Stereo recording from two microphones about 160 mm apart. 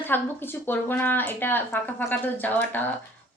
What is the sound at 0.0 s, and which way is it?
A woman's voice, 10° left (ahead or behind).